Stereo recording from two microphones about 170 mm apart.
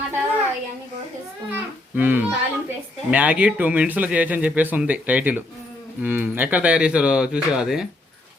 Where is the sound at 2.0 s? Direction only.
10° right (ahead or behind).